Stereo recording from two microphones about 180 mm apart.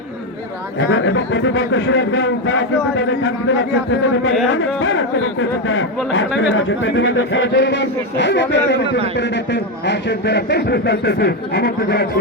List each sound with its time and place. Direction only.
0.8 s a man's voice: 90° left; by 12.2 s 65° left (ahead or behind)